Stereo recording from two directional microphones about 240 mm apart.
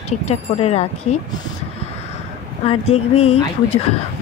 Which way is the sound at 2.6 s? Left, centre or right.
Left.